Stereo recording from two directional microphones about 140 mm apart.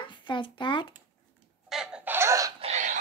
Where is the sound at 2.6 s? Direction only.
55° right (ahead or behind).